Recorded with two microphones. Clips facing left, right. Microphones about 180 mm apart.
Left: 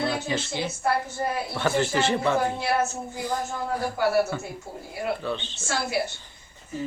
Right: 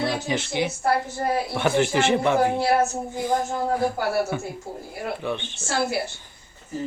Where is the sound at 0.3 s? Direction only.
15° right (ahead or behind).